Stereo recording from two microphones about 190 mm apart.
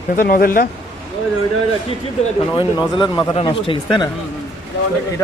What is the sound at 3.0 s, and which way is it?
Speech, 25° left (ahead or behind).